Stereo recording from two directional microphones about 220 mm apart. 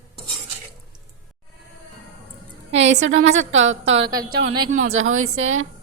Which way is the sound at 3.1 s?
60° right (ahead or behind).